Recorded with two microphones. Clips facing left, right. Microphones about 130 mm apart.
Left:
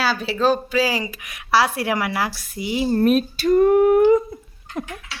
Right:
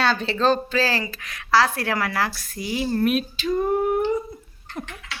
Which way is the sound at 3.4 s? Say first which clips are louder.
Left 8 dB; 80° left.